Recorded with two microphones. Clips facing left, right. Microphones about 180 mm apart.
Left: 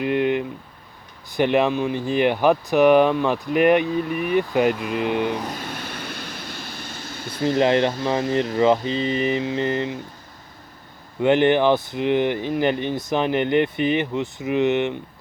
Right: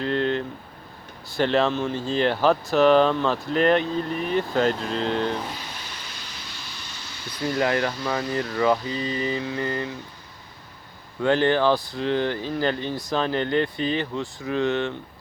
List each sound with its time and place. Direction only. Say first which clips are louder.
0.0 s a sound: left 3 dB; 15° left (ahead or behind)
1.3 s speech: left 3 dB; 15° left (ahead or behind)
5.5 s vehicle: left 6 dB; 50° left (ahead or behind)
7.4 s speech: left 5 dB; 25° left (ahead or behind)
11.2 s speech: left 3 dB; 20° left (ahead or behind)